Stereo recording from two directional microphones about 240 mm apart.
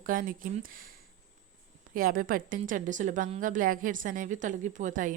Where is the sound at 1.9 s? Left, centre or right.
Right.